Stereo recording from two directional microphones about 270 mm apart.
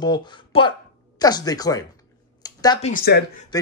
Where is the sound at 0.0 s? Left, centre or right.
Centre.